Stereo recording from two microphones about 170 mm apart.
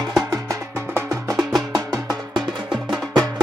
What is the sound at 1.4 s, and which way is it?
Music, centre (ahead or behind).